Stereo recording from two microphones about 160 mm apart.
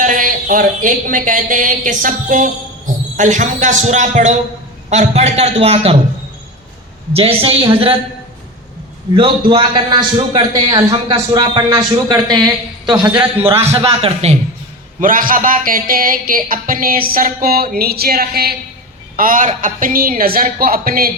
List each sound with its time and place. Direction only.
0.0 s a man's voice: 55° right (ahead or behind); by 6.0 s 40° right (ahead or behind)
7.1 s a woman's voice: 35° right (ahead or behind)
9.1 s a man's voice: 30° right (ahead or behind)
13.4 s a man's voice: 15° right (ahead or behind)
13.7 s a woman's voice: 40° right (ahead or behind)
15.0 s speech: 60° right (ahead or behind)
19.1 s speech: 60° right (ahead or behind)